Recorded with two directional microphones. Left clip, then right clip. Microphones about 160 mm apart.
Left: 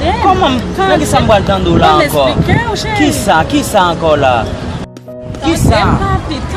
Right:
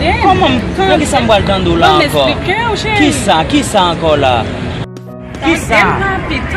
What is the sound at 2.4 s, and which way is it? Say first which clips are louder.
Speech: right 1 dB; 20° left (ahead or behind).